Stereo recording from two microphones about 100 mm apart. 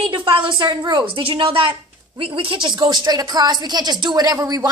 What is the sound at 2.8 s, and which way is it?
Speech, 45° right (ahead or behind).